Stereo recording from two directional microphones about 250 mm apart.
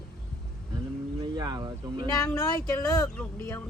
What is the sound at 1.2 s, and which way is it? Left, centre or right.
Speech, centre.